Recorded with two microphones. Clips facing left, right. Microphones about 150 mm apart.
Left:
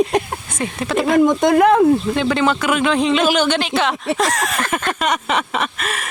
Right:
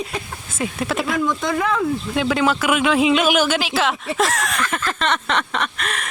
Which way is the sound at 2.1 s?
5° right (ahead or behind).